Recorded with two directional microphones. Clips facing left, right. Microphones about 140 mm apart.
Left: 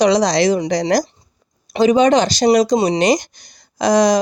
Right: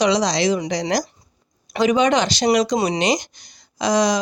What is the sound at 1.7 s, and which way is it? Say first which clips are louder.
Speech: left 5 dB; 30° left (ahead or behind).